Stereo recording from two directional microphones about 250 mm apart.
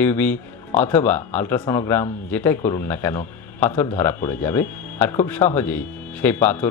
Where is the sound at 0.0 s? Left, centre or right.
Centre.